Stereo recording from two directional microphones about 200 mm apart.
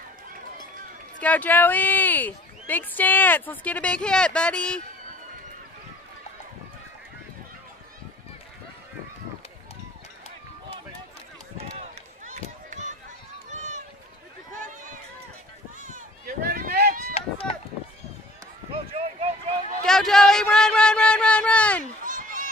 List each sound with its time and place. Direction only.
1.2 s speech: 10° left (ahead or behind)
12.3 s run: 35° right (ahead or behind)
15.8 s run: 45° right (ahead or behind)
18.7 s run: 30° right (ahead or behind)
19.9 s a sound: centre (ahead or behind)
22.0 s a sound: 40° right (ahead or behind)